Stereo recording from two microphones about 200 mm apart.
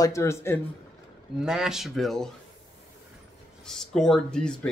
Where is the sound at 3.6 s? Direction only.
Centre (ahead or behind).